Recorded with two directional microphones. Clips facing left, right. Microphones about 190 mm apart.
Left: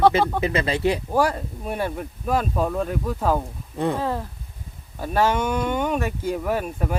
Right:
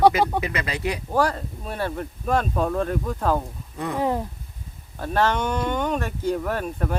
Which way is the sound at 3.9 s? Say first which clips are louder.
Right 2 dB; 15° right (ahead or behind).